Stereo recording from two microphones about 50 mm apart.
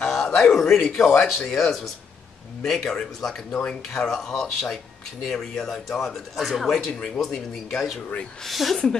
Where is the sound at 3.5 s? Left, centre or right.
Centre.